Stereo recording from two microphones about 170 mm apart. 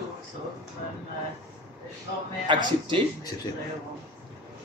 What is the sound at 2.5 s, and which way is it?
Speech, 25° right (ahead or behind).